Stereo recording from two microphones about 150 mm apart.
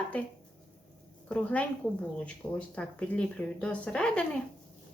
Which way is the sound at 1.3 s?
10° left (ahead or behind).